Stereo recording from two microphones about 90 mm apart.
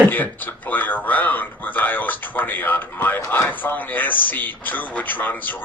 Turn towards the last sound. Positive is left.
turn(degrees=20)  # may be behind; listen again after turning